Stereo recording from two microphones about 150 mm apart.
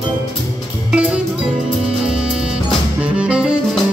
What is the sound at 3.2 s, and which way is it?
Music, 5° right (ahead or behind).